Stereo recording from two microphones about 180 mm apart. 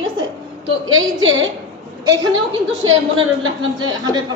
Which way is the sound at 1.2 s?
90° right.